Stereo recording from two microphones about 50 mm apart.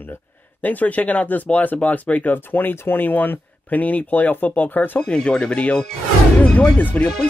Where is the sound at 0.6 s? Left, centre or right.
Left.